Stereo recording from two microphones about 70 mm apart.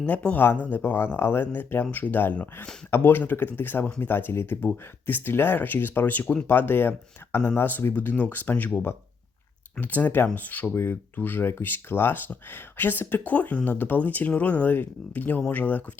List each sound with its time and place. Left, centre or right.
0.0 s speech: centre